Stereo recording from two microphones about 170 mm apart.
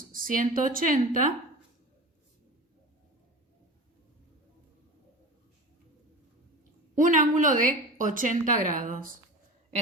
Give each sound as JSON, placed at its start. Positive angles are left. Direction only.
{"t": 0.1, "sound": "a woman's voice", "side_deg": -55}
{"t": 6.9, "sound": "a woman's voice", "side_deg": -50}